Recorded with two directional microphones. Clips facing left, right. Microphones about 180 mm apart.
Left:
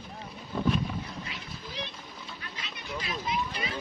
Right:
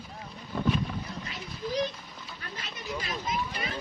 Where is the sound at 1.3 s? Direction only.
40° right (ahead or behind).